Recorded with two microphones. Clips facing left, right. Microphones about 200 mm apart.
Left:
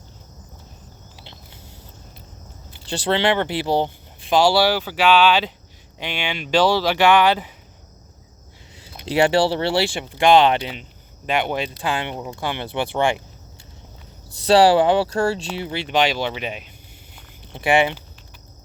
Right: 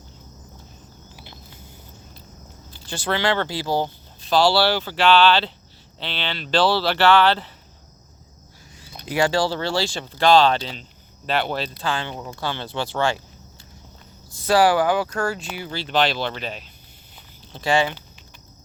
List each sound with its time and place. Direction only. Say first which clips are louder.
1.2 s a sound: even; 25° left (ahead or behind)
3.1 s speech: left 3 dB; 20° left (ahead or behind)
8.8 s speech: left 3 dB; 25° left (ahead or behind)
14.5 s speech: left 4 dB; 30° left (ahead or behind)